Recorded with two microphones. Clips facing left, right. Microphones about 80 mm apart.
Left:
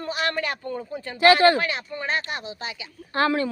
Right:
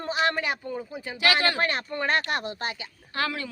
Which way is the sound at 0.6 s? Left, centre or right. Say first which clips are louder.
Left 2 dB; centre.